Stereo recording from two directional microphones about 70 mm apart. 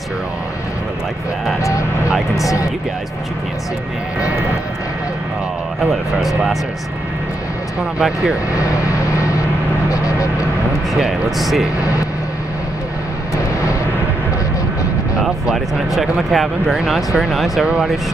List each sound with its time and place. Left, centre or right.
5.8 s speech: centre
8.0 s speech: centre
9.8 s vehicle: left
11.0 s speech: centre
15.1 s speech: centre